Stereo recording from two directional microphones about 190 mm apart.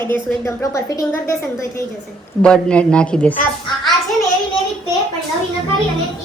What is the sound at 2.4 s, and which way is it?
Speech, 5° left (ahead or behind).